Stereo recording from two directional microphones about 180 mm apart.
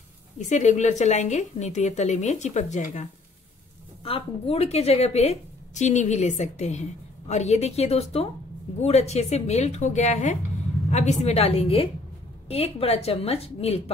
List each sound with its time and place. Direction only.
0.5 s a woman's voice: 40° left (ahead or behind)